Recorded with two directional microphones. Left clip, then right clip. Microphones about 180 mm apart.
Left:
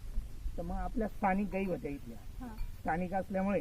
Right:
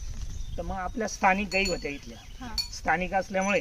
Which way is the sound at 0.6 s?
35° right (ahead or behind).